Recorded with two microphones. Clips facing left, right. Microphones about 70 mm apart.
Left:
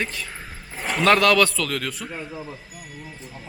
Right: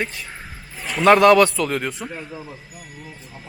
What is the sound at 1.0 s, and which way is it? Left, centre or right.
A man's voice, centre.